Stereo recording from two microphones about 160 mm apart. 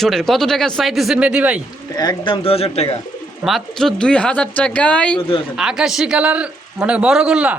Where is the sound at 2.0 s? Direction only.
30° left (ahead or behind).